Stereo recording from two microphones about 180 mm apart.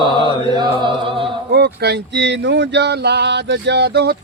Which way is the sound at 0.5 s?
25° right (ahead or behind).